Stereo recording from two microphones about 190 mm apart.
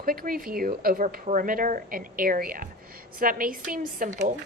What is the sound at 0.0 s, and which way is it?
Speech, 50° right (ahead or behind).